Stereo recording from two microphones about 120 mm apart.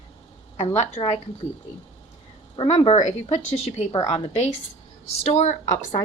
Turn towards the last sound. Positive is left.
turn(degrees=70)  # may be behind; listen again after turning